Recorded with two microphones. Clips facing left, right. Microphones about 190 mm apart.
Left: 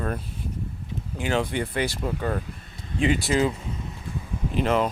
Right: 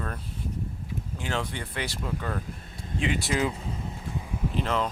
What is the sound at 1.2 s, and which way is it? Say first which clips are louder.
Speech: left 7 dB; 15° left (ahead or behind).